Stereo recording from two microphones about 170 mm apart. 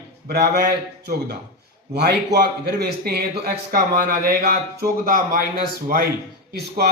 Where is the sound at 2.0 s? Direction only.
70° right (ahead or behind); by 5.5 s 55° right (ahead or behind).